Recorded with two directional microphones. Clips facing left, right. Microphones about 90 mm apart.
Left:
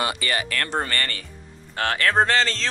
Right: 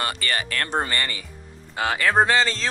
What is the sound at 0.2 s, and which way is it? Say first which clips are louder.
Speech: left 1 dB; 35° right (ahead or behind).